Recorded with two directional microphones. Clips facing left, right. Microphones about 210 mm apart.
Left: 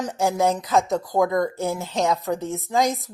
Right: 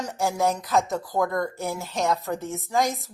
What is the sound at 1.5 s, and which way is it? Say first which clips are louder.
Speech: left 4 dB; 15° left (ahead or behind).